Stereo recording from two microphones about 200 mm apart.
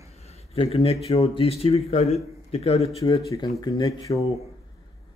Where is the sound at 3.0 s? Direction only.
15° left (ahead or behind).